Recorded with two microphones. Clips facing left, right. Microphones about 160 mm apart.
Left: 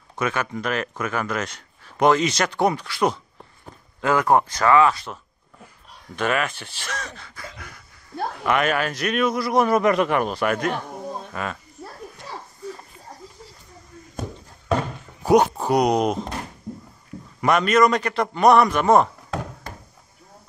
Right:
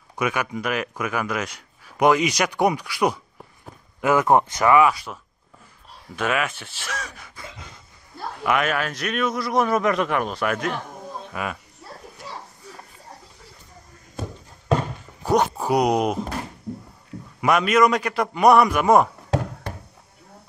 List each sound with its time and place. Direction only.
0.1 s speech: 10° right (ahead or behind)
4.1 s a man's voice: 20° right (ahead or behind)
8.5 s a man's voice: centre (ahead or behind)
15.5 s a man's voice: 5° right (ahead or behind)
17.4 s a man's voice: 5° right (ahead or behind)